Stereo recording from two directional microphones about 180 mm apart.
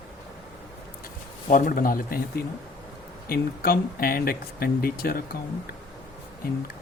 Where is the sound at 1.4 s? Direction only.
50° left (ahead or behind).